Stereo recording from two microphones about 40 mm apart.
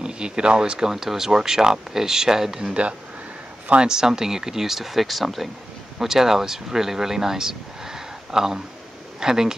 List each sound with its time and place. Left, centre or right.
0.0 s speech: right
2.7 s speech: right
3.8 s speech: centre